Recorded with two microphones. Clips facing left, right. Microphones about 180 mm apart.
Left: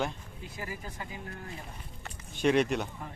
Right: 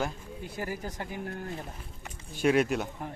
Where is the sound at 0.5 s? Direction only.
70° right (ahead or behind).